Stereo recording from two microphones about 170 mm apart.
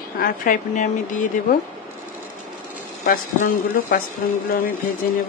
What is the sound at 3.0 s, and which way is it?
Speech, 55° left (ahead or behind).